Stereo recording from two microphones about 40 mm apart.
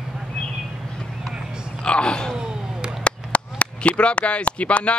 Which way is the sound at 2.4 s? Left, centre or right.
Right.